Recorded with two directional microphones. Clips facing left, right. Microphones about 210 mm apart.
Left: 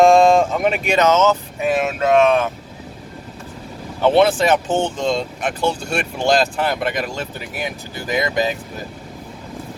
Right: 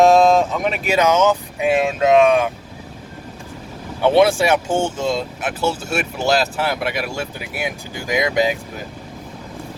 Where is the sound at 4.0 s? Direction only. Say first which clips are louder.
Even; 10° right (ahead or behind).